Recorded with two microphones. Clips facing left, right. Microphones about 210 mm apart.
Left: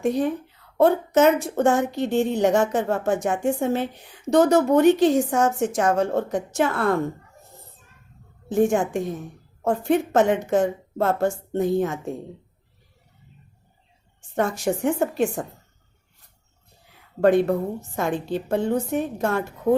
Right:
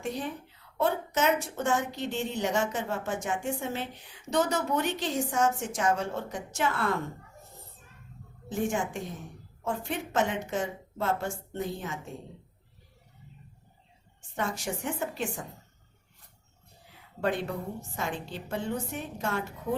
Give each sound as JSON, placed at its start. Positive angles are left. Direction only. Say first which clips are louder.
{"t": 0.0, "sound": "a woman's voice", "louder": "left 12 dB", "side_deg": 55}
{"t": 8.4, "sound": "a woman's voice", "louder": "left 10 dB", "side_deg": 55}
{"t": 14.3, "sound": "a woman's voice", "louder": "left 10 dB", "side_deg": 55}
{"t": 17.2, "sound": "a woman's voice", "louder": "left 12 dB", "side_deg": 55}